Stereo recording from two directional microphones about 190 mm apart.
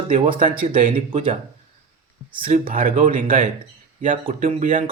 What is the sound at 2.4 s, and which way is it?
Speech, 40° right (ahead or behind).